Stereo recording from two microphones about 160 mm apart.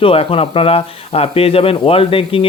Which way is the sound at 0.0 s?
35° left (ahead or behind).